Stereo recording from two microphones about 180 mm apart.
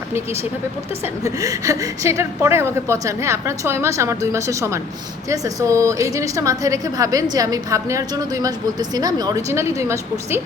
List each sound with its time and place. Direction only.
1.0 s a woman's voice: 20° right (ahead or behind)